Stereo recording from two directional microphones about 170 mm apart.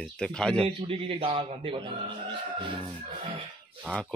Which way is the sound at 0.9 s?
30° right (ahead or behind).